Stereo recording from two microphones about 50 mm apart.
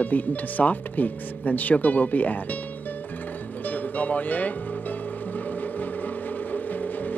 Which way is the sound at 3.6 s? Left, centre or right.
Left.